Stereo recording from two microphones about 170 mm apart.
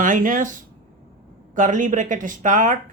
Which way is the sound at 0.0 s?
50° right (ahead or behind).